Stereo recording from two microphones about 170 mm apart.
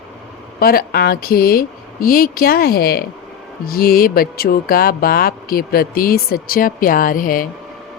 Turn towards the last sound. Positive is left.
turn(degrees=55)  # may be behind; listen again after turning